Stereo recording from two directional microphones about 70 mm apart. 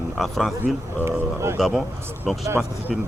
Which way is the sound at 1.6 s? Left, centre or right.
Centre.